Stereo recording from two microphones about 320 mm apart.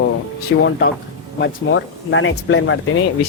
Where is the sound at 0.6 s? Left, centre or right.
Left.